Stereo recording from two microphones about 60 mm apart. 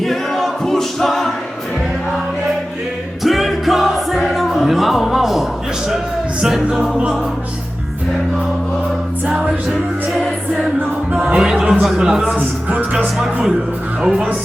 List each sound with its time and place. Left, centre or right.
0.0 s a capella: centre
3.2 s music: centre
11.1 s music: right
11.6 s speech: centre
12.7 s music: right
14.0 s music: centre